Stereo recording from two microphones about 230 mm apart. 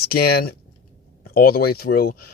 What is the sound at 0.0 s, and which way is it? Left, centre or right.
Speech, left.